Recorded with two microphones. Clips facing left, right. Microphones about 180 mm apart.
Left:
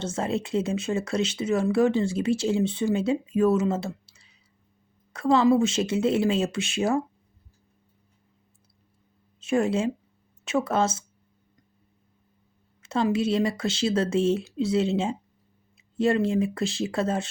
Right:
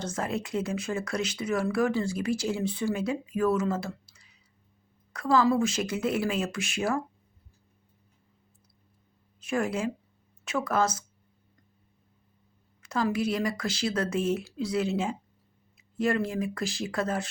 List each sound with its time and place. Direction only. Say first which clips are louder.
0.0 s speech: left 4 dB; 25° left (ahead or behind)
9.4 s speech: left 5 dB; 25° left (ahead or behind)
12.8 s speech: left 4 dB; 25° left (ahead or behind)